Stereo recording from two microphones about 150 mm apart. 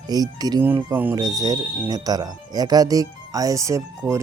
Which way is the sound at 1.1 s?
25° right (ahead or behind).